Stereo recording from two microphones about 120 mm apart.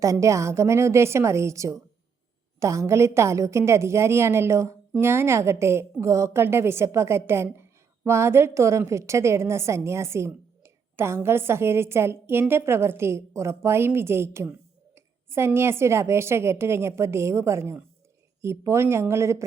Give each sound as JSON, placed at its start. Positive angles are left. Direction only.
{"t": 0.0, "sound": "a woman's voice", "side_deg": -25}